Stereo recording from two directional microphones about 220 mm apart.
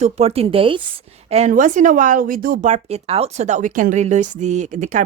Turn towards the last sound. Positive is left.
turn(degrees=-35)  # may be behind; listen again after turning